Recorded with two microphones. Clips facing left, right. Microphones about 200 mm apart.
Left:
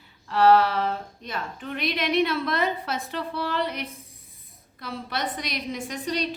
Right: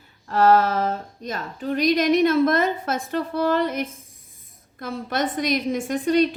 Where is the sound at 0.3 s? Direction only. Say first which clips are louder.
Right 1 dB; 45° right (ahead or behind).